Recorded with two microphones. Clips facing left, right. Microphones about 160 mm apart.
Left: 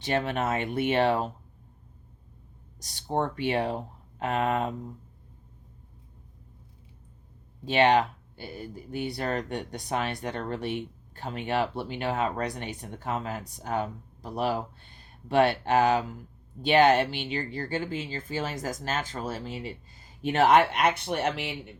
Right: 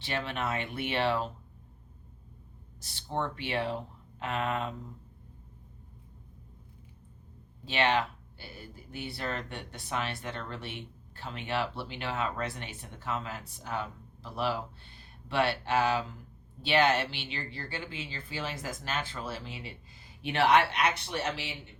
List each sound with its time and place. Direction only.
0.0 s speech: 45° left (ahead or behind)
2.8 s speech: 45° left (ahead or behind)
7.6 s speech: 45° left (ahead or behind)